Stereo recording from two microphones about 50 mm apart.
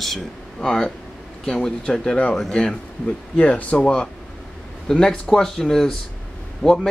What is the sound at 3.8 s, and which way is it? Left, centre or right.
Speech, centre.